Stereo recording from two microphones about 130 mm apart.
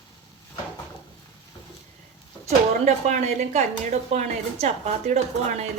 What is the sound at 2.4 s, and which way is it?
A woman's voice, 60° right (ahead or behind).